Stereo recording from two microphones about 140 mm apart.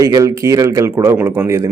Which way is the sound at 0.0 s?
25° right (ahead or behind).